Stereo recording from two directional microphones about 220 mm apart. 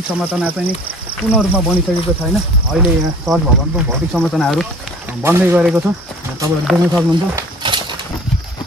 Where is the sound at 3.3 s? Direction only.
15° right (ahead or behind).